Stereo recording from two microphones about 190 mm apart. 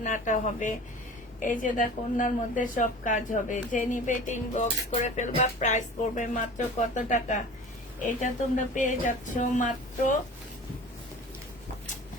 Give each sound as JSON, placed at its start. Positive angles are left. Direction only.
{"t": 0.0, "sound": "a woman's voice", "side_deg": 40}